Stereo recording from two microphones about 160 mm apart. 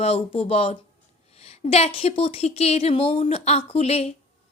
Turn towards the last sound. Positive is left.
turn(degrees=40)  # may be behind; listen again after turning